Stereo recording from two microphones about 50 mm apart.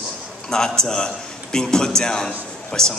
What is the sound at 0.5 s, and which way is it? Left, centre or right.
A man's voice, centre.